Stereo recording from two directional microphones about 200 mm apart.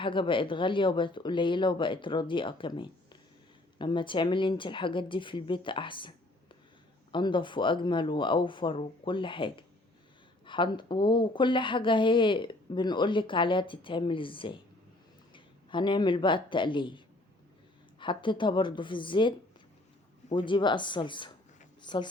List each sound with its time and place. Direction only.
0.0 s speech: 25° left (ahead or behind)
18.0 s speech: 25° left (ahead or behind)
20.3 s speech: 25° left (ahead or behind)